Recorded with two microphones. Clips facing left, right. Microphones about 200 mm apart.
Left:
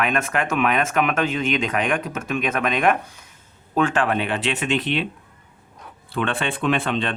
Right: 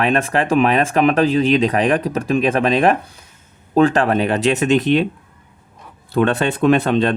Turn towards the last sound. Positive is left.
turn(degrees=-40)  # may be behind; listen again after turning